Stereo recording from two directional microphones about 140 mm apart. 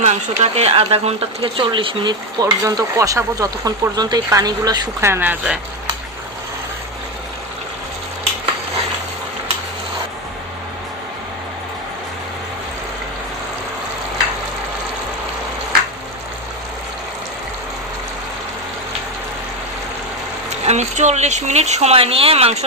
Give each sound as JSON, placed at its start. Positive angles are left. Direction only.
{"t": 0.0, "sound": "speech", "side_deg": -50}
{"t": 2.4, "sound": "speech", "side_deg": -25}
{"t": 20.7, "sound": "speech", "side_deg": -55}